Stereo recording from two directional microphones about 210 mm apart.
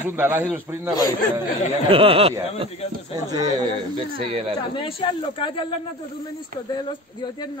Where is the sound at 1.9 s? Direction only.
25° right (ahead or behind).